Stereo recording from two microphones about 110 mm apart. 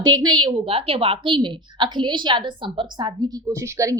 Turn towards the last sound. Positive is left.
turn(degrees=-30)  # may be behind; listen again after turning